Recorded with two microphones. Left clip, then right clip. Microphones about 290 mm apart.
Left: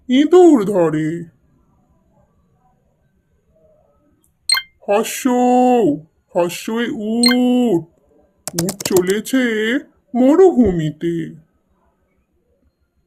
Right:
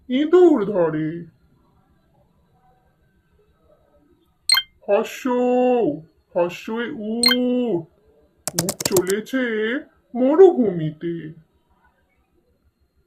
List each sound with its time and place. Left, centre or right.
0.1 s speech: left
4.5 s chink: centre
4.9 s speech: left
8.4 s speech: centre
9.1 s speech: left